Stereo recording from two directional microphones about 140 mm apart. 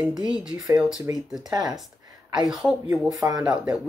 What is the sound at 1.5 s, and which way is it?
Speech, 25° right (ahead or behind).